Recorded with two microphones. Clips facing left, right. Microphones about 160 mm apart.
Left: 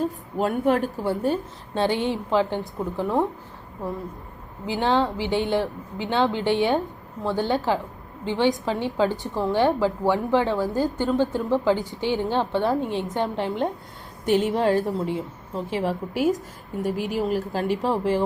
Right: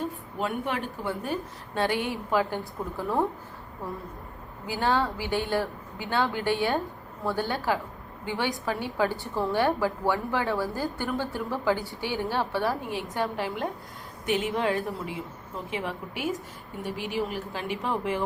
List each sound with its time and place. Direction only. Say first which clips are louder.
0.0 s a woman's voice: left 6 dB; 40° left (ahead or behind)
1.3 s a woman's voice: left 5 dB; 25° left (ahead or behind)
4.6 s a woman's voice: left 4 dB; 20° left (ahead or behind)
14.3 s a woman's voice: left 7 dB; 40° left (ahead or behind)